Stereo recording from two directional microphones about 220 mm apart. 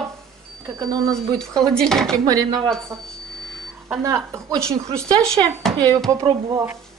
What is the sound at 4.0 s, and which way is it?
Speech, 15° right (ahead or behind).